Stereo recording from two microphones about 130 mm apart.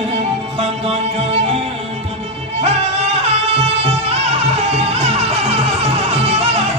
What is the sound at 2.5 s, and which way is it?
Music, 55° right (ahead or behind).